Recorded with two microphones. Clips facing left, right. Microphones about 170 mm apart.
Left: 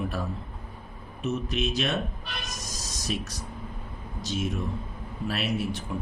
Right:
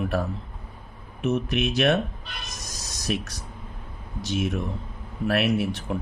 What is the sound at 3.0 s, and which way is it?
Speech, 65° right (ahead or behind).